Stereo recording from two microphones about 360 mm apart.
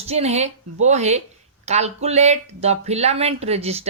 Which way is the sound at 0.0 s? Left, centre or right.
Centre.